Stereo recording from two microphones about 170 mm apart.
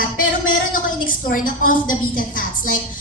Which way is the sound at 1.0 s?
55° left (ahead or behind).